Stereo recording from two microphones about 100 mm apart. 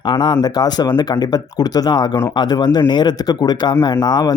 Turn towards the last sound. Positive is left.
turn(degrees=45)  # may be behind; listen again after turning